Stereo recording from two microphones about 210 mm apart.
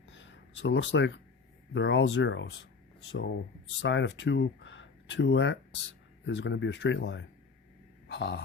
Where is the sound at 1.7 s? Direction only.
60° left (ahead or behind).